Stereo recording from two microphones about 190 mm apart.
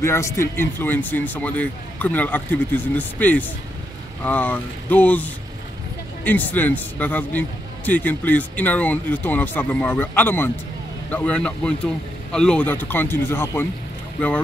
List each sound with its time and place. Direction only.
0.0 s speech: 15° left (ahead or behind)